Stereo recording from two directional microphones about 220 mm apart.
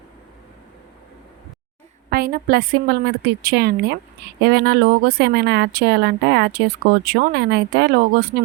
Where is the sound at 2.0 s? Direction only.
40° right (ahead or behind).